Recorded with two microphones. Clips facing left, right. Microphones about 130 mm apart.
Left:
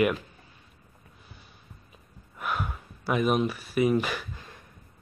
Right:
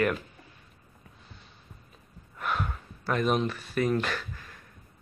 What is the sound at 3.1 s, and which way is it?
Speech, 10° left (ahead or behind).